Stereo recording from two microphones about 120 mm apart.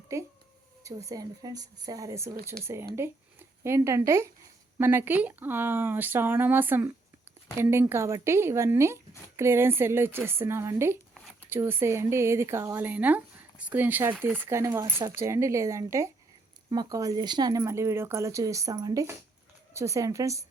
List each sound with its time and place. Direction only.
0.1 s speech: 25° right (ahead or behind)
17.6 s speech: 20° right (ahead or behind)